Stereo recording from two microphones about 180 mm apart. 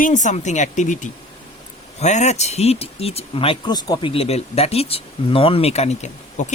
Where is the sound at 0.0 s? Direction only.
45° left (ahead or behind).